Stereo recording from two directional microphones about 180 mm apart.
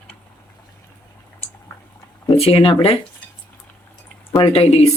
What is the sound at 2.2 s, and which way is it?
Speech, 30° left (ahead or behind).